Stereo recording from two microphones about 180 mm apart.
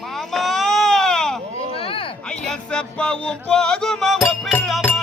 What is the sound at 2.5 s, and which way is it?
Music, 5° left (ahead or behind).